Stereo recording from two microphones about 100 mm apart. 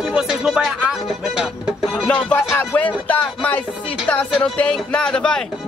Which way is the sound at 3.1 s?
15° left (ahead or behind).